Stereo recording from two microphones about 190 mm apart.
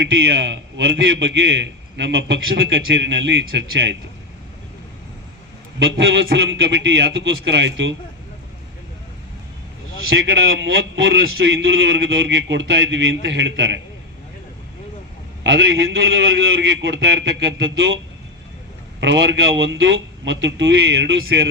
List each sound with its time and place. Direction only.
0.1 s a man's voice: 70° right (ahead or behind)
5.8 s a man's voice: 70° right (ahead or behind)
10.1 s a man's voice: 85° right
15.4 s a man's voice: 70° right (ahead or behind)
18.9 s a man's voice: 70° right (ahead or behind)